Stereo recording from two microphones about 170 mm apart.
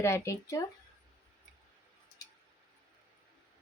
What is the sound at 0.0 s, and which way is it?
Speech, 15° left (ahead or behind).